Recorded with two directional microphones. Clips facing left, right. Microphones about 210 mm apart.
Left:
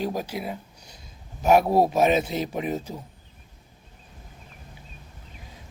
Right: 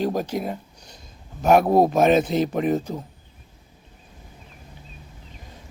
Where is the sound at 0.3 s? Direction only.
45° right (ahead or behind).